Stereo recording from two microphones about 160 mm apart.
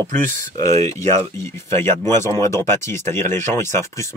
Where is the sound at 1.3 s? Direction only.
15° left (ahead or behind).